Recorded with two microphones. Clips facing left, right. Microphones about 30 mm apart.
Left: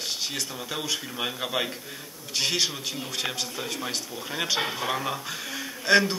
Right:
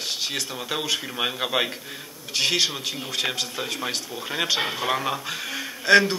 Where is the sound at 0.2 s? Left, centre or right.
Right.